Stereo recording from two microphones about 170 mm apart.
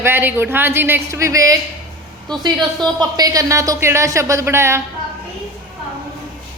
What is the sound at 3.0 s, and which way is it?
A woman's voice, 20° right (ahead or behind).